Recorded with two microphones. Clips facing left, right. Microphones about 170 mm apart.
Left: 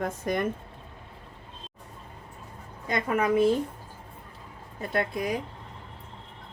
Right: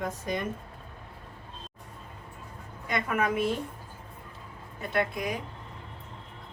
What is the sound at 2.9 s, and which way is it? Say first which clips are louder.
Speech: left 4 dB; 30° left (ahead or behind).